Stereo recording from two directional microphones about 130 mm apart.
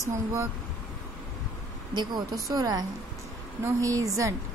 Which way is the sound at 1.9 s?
35° right (ahead or behind).